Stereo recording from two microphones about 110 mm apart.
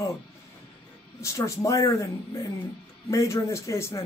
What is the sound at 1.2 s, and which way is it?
A woman's voice, 30° left (ahead or behind).